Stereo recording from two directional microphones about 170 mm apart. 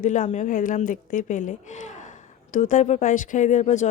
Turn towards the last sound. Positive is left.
turn(degrees=45)  # may be behind; listen again after turning